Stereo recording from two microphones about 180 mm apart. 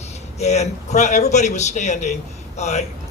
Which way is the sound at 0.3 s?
40° left (ahead or behind).